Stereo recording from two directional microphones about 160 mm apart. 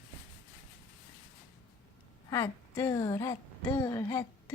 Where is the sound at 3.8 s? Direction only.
20° left (ahead or behind).